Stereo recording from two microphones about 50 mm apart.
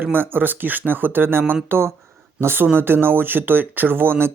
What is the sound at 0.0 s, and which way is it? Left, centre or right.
Speech, right.